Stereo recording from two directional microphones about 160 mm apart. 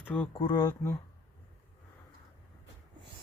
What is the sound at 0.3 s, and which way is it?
Speech, 25° left (ahead or behind).